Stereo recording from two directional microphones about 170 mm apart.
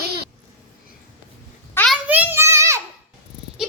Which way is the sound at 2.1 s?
10° right (ahead or behind).